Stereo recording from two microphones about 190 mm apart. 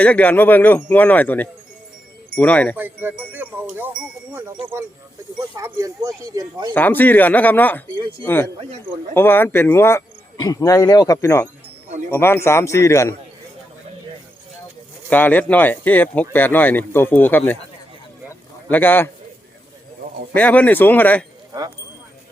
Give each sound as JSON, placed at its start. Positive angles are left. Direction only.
{"t": 0.0, "sound": "speech", "side_deg": 10}
{"t": 2.7, "sound": "speech", "side_deg": -10}
{"t": 6.7, "sound": "speech", "side_deg": 10}
{"t": 9.1, "sound": "speech", "side_deg": 10}
{"t": 15.1, "sound": "speech", "side_deg": 10}
{"t": 18.3, "sound": "a sound", "side_deg": 10}
{"t": 20.3, "sound": "speech", "side_deg": 10}